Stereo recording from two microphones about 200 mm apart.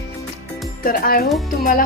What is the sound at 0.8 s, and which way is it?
Speech, 45° left (ahead or behind).